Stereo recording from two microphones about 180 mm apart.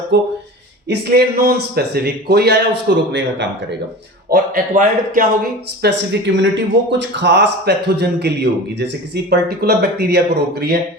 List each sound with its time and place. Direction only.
0.1 s a man's voice: 75° right (ahead or behind)
0.9 s speech: 55° right (ahead or behind); by 3.8 s 75° right (ahead or behind)
4.3 s speech: 50° right (ahead or behind)
5.8 s a man's voice: 75° right (ahead or behind)